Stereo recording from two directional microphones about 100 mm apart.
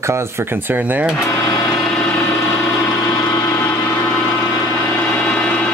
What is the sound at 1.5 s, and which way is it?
Vehicle, 45° left (ahead or behind).